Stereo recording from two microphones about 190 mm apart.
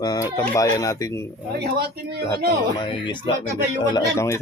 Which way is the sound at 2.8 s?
25° left (ahead or behind).